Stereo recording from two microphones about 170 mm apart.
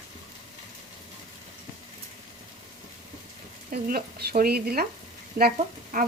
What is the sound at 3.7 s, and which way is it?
Speech, 60° right (ahead or behind).